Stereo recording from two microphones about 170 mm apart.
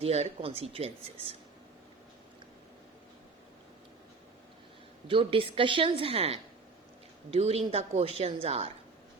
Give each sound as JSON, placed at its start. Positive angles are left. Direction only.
{"t": 0.0, "sound": "a woman's voice", "side_deg": -35}
{"t": 5.0, "sound": "a woman's voice", "side_deg": -30}